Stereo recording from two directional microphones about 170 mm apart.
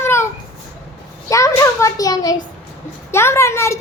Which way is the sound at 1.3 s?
20° left (ahead or behind).